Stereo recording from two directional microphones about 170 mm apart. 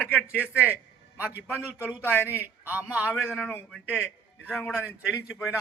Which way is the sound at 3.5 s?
5° left (ahead or behind).